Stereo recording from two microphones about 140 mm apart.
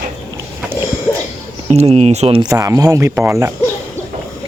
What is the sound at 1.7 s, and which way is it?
Speech, 50° right (ahead or behind).